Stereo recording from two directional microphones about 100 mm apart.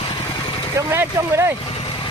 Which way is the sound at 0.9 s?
25° right (ahead or behind).